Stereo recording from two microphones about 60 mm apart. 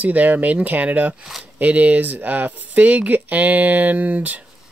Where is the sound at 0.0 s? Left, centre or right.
Right.